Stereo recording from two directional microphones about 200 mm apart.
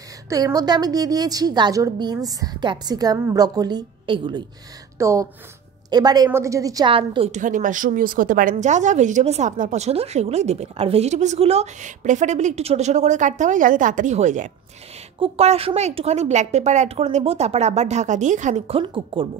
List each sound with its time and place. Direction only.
0.3 s a woman's voice: 15° right (ahead or behind)